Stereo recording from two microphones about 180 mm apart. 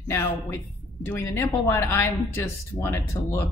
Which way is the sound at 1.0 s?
10° left (ahead or behind).